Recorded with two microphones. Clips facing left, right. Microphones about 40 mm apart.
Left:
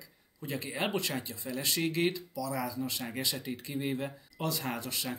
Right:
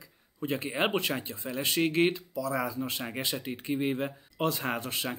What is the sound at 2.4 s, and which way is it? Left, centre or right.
Speech, right.